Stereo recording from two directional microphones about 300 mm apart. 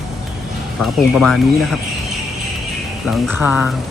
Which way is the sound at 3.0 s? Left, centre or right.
Centre.